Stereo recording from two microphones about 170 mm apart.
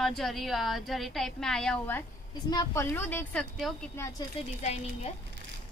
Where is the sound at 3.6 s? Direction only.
Centre (ahead or behind).